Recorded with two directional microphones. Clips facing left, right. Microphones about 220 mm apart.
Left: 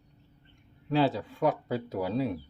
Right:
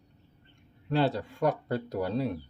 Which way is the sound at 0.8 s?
Centre (ahead or behind).